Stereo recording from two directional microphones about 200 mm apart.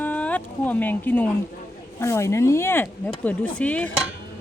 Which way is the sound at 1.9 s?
15° left (ahead or behind).